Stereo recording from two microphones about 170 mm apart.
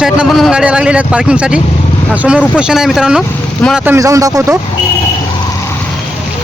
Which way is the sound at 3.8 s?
15° right (ahead or behind).